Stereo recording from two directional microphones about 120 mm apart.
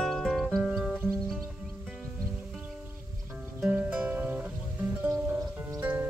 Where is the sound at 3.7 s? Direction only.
10° right (ahead or behind).